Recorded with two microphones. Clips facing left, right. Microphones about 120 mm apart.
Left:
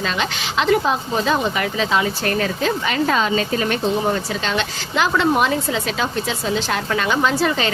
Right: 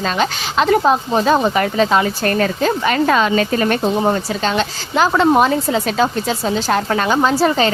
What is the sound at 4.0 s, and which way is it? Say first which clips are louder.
A woman's voice: right 4 dB; 35° right (ahead or behind).